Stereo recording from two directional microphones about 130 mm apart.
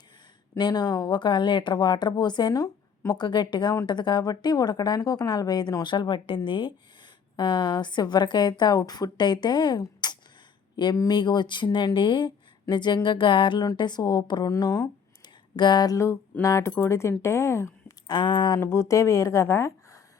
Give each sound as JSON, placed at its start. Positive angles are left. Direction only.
{"t": 0.5, "sound": "a woman's voice", "side_deg": 30}
{"t": 18.1, "sound": "speech", "side_deg": 35}
{"t": 18.6, "sound": "a woman's voice", "side_deg": 20}